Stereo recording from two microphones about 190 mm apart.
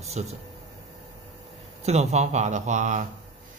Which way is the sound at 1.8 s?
35° right (ahead or behind).